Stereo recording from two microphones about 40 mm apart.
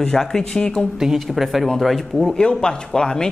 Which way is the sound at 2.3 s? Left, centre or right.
Centre.